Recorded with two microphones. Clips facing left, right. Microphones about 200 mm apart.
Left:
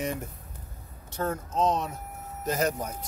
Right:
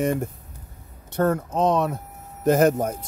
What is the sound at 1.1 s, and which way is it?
Speech, 60° right (ahead or behind).